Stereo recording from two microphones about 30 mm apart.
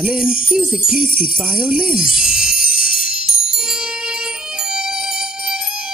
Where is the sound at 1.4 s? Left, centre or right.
Right.